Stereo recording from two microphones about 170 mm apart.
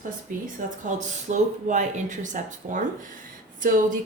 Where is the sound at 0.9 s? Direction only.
45° right (ahead or behind).